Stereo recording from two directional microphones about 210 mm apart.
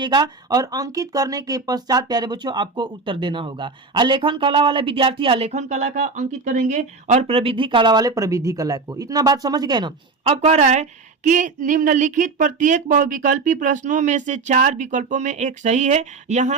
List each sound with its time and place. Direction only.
0.0 s speech: 20° right (ahead or behind)